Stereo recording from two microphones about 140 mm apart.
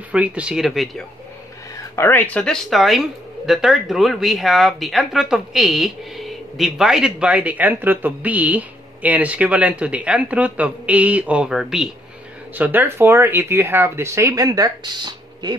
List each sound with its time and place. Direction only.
0.1 s speech: 10° right (ahead or behind)
2.0 s speech: 15° left (ahead or behind); by 15.5 s 30° right (ahead or behind)